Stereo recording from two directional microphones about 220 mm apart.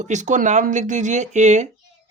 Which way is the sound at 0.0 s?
35° right (ahead or behind).